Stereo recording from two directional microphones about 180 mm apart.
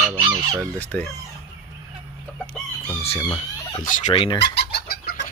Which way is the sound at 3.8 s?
45° left (ahead or behind).